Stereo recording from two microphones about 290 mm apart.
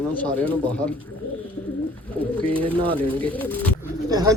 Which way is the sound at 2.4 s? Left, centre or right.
Centre.